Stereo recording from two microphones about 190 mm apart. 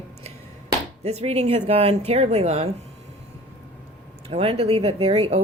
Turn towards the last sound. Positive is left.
turn(degrees=-30)  # may be behind; listen again after turning